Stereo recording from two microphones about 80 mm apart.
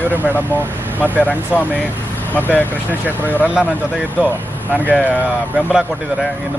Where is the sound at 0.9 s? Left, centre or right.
Left.